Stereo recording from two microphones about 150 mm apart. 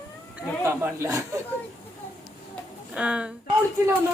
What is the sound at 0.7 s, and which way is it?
Speech, 15° right (ahead or behind).